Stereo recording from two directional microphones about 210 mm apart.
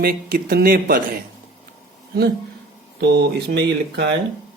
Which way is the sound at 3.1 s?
50° right (ahead or behind).